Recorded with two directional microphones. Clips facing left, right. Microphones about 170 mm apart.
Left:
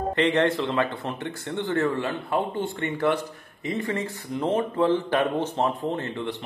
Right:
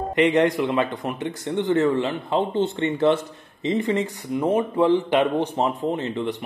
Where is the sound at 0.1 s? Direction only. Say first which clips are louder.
Right 4 dB; 15° right (ahead or behind).